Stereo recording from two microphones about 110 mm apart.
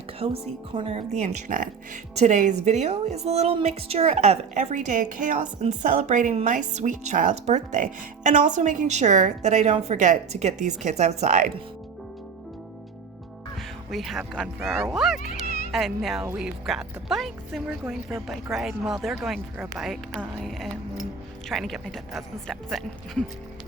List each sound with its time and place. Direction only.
0.2 s a woman's voice: 60° right (ahead or behind); by 3.2 s 90° right
3.2 s a woman's voice: 70° right (ahead or behind); by 11.4 s 90° right
13.6 s speech: centre (ahead or behind)